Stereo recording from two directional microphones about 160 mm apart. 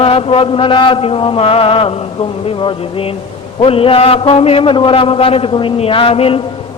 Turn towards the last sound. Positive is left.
turn(degrees=35)  # may be behind; listen again after turning